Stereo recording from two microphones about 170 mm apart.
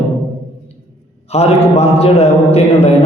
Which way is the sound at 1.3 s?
35° left (ahead or behind).